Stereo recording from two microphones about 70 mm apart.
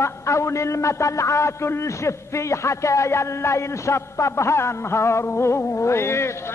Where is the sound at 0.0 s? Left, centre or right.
Left.